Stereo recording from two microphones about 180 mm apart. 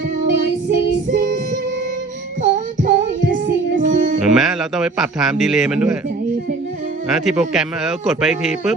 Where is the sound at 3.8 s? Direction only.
45° right (ahead or behind).